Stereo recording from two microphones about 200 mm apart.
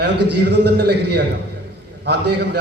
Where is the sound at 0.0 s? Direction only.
55° right (ahead or behind).